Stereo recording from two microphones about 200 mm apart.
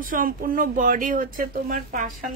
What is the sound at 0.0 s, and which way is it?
Speech, 45° right (ahead or behind).